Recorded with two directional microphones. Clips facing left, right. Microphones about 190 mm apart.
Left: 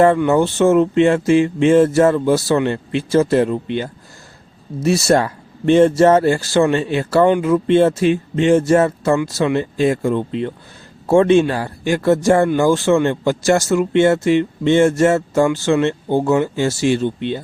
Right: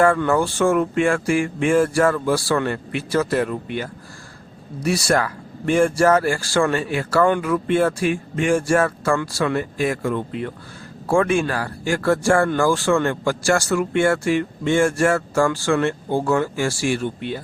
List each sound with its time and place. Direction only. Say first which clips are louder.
0.0 s speech: left 4 dB; 20° left (ahead or behind)